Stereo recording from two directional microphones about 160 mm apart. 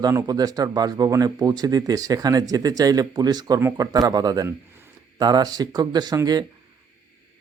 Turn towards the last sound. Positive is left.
turn(degrees=-25)  # may be behind; listen again after turning